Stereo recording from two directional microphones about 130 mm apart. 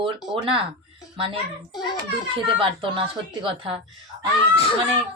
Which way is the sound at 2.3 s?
40° right (ahead or behind).